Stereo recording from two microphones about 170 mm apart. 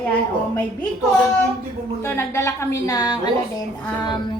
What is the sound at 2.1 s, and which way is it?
A woman's voice, 15° left (ahead or behind).